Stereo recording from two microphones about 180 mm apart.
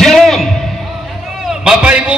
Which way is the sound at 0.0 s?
Centre (ahead or behind).